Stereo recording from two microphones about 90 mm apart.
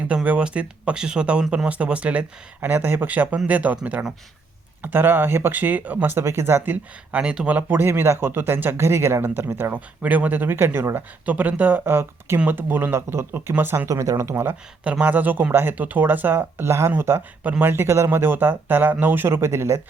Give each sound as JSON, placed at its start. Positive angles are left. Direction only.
{"t": 0.1, "sound": "speech", "side_deg": -10}
{"t": 7.2, "sound": "speech", "side_deg": -10}
{"t": 13.8, "sound": "speech", "side_deg": -40}
{"t": 14.8, "sound": "speech", "side_deg": -15}